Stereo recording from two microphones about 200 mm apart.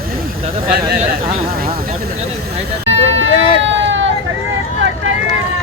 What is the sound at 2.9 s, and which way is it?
Vehicle, 70° right (ahead or behind).